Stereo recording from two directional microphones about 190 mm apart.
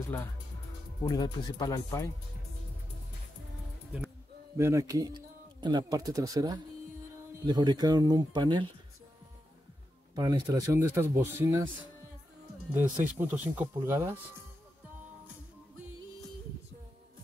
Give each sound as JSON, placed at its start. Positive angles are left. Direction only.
{"t": 1.0, "sound": "speech", "side_deg": 20}
{"t": 4.6, "sound": "speech", "side_deg": -15}
{"t": 10.1, "sound": "speech", "side_deg": -20}
{"t": 12.7, "sound": "speech", "side_deg": -10}